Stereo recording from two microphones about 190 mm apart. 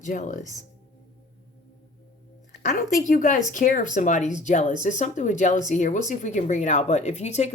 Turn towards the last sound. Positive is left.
turn(degrees=35)  # may be behind; listen again after turning